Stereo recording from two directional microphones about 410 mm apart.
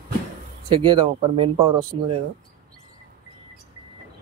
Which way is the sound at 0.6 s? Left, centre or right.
Centre.